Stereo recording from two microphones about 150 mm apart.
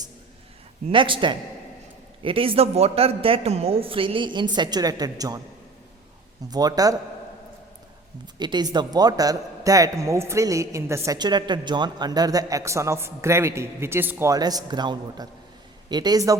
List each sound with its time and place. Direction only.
0.9 s a woman's voice: 35° right (ahead or behind)
6.5 s speech: 25° right (ahead or behind)
8.4 s speech: 30° right (ahead or behind)